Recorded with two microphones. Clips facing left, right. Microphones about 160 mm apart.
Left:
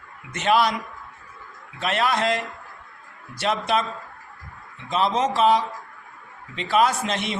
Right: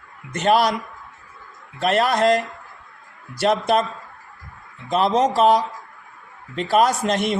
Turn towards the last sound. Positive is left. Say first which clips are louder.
# right 6 dB
turn(degrees=-45)  # may be behind; listen again after turning